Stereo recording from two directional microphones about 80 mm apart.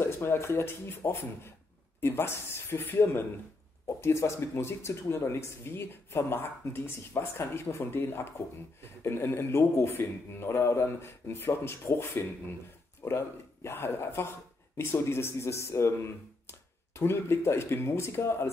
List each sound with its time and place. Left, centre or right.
0.0 s speech: left